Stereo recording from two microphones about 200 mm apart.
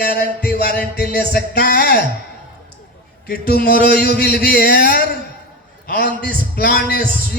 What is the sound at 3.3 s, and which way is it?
A man's voice, 50° left (ahead or behind).